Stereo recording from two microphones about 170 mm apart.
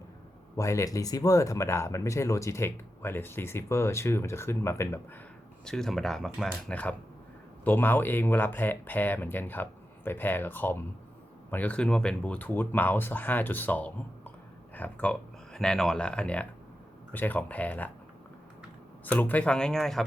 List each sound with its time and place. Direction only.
0.5 s speech: 15° left (ahead or behind)
5.6 s speech: 5° left (ahead or behind)
19.0 s speech: 10° left (ahead or behind)